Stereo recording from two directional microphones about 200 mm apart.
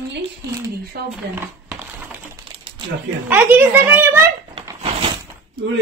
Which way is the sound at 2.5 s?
25° right (ahead or behind).